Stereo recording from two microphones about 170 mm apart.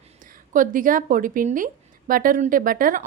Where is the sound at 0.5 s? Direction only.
50° right (ahead or behind).